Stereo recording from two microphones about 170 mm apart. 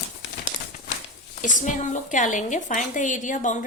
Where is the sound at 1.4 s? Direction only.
45° left (ahead or behind).